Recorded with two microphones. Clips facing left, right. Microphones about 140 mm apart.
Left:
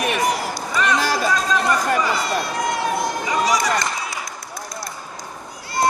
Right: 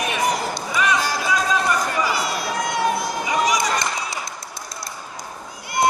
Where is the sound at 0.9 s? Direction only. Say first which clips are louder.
Left 3 dB; 85° left.